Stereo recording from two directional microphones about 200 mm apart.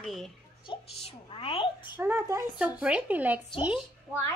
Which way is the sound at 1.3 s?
25° left (ahead or behind).